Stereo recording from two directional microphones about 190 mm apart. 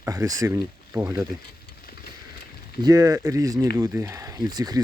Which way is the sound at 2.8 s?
20° right (ahead or behind).